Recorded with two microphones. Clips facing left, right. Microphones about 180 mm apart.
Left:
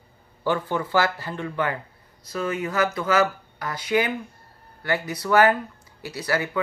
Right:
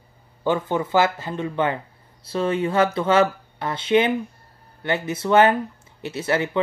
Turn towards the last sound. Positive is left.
turn(degrees=-25)  # may be behind; listen again after turning